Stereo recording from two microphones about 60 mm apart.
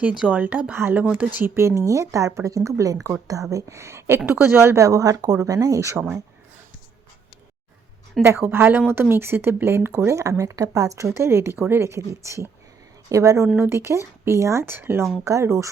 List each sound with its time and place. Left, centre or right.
0.3 s speech: right
0.8 s a woman's voice: right
1.5 s a woman's voice: right
3.5 s speech: right
4.8 s speech: right
8.2 s a woman's voice: right
13.1 s a woman's voice: right
13.6 s speech: right
15.2 s a woman's voice: right